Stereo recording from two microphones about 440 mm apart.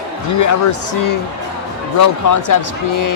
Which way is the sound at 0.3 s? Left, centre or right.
Left.